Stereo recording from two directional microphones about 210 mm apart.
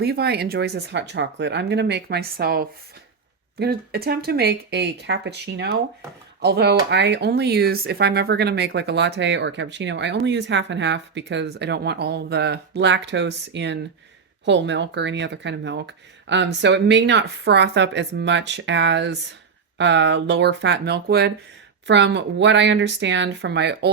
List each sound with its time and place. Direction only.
0.0 s speech: 50° right (ahead or behind)